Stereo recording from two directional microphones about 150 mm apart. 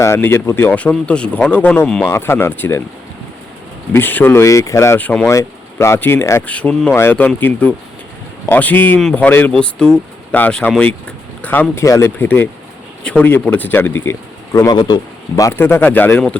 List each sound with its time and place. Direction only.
0.0 s speech: 15° left (ahead or behind)
3.9 s speech: 15° left (ahead or behind); by 14.9 s 30° left (ahead or behind)
15.4 s speech: 20° left (ahead or behind)